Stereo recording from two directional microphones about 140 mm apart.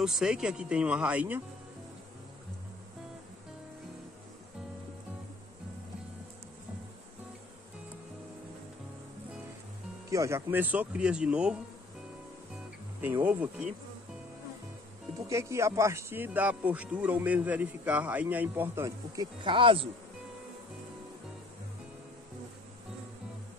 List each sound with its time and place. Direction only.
0.0 s speech: 5° right (ahead or behind)
10.0 s speech: 20° right (ahead or behind)
13.0 s speech: 10° right (ahead or behind)
15.2 s speech: 20° right (ahead or behind)
19.4 s speech: 40° right (ahead or behind)